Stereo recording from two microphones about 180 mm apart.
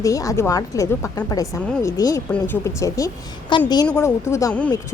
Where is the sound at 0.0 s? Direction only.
20° left (ahead or behind).